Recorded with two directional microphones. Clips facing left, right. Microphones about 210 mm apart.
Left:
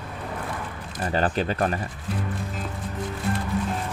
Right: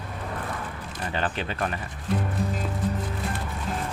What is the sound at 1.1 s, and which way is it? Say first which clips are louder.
Speech: left 6 dB; 40° left (ahead or behind).